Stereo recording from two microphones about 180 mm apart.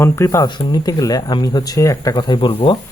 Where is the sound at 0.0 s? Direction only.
15° left (ahead or behind).